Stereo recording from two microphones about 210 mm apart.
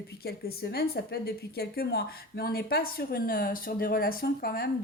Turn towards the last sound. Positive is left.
turn(degrees=45)  # may be behind; listen again after turning